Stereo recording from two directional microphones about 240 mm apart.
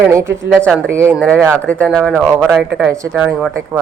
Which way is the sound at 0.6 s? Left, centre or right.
Centre.